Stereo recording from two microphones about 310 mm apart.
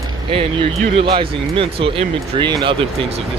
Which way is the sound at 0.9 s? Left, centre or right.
Centre.